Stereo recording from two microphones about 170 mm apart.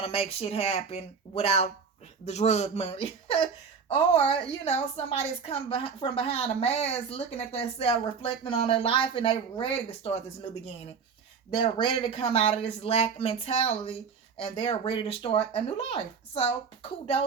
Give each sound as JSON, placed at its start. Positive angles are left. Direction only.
{"t": 0.0, "sound": "a woman's voice", "side_deg": 35}
{"t": 11.5, "sound": "a woman's voice", "side_deg": 30}